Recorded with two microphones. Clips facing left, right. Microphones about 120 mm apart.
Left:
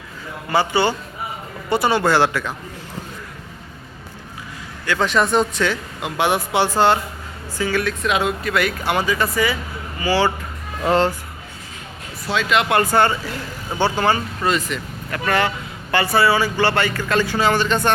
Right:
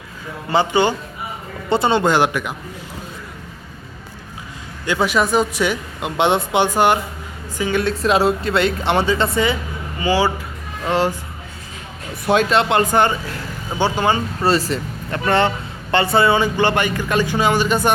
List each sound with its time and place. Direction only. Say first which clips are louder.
0.5 s speech: right 2 dB; 20° right (ahead or behind)
4.9 s speech: right 1 dB; 10° right (ahead or behind)
12.2 s speech: right 7 dB; 50° right (ahead or behind)
12.5 s speech: right 1 dB; 30° right (ahead or behind)
14.4 s speech: right 4 dB; 35° right (ahead or behind); by 17.9 s 10° right (ahead or behind)